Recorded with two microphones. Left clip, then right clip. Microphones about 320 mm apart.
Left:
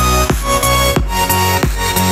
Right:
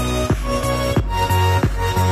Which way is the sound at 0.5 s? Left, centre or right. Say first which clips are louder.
Left 9 dB; left.